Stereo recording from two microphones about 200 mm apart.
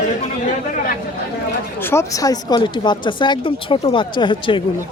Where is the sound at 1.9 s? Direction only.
15° left (ahead or behind).